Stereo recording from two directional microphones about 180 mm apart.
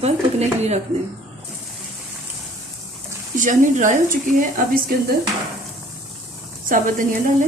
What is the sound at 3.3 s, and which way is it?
Speech, 45° right (ahead or behind).